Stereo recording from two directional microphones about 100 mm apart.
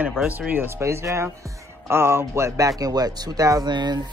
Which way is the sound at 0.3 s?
15° right (ahead or behind).